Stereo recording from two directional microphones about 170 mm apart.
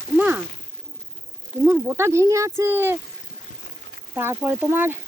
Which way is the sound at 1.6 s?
15° right (ahead or behind).